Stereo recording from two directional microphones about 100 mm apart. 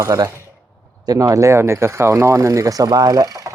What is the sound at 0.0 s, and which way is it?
Speech, 35° right (ahead or behind).